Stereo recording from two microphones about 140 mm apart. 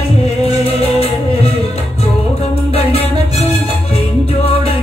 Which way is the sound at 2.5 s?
45° left (ahead or behind).